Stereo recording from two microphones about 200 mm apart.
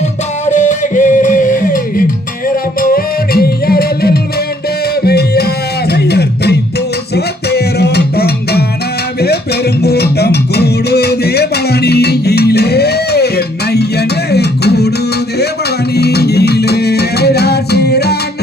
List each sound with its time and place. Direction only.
0.4 s music: 40° left (ahead or behind)
9.8 s music: 55° left (ahead or behind)
16.0 s music: 55° left (ahead or behind)